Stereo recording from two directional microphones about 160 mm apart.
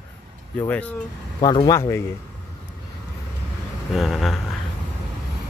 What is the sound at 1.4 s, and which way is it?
Speech, 30° left (ahead or behind).